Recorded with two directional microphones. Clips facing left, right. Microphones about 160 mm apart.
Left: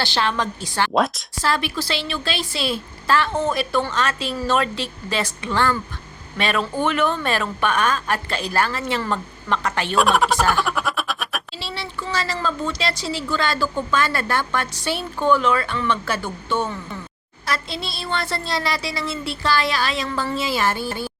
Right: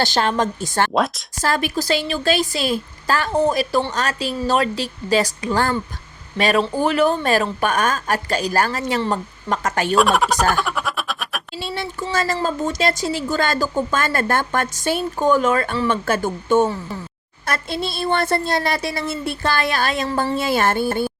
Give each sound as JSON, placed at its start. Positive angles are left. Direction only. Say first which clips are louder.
{"t": 0.0, "sound": "speech", "louder": "right 4 dB", "side_deg": -45}
{"t": 0.9, "sound": "speech", "louder": "left 4 dB", "side_deg": 0}
{"t": 1.4, "sound": "speech", "louder": "right 2 dB", "side_deg": -45}
{"t": 9.9, "sound": "speech", "louder": "right 1 dB", "side_deg": 0}
{"t": 10.6, "sound": "a sound", "louder": "even", "side_deg": 0}
{"t": 11.6, "sound": "speech", "louder": "right 7 dB", "side_deg": -50}